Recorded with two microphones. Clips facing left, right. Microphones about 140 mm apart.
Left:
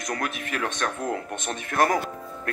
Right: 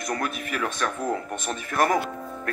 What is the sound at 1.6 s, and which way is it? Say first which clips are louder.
Speech: even; 45° left (ahead or behind).